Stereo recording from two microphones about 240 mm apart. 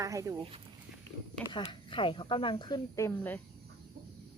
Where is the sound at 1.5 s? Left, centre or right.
Left.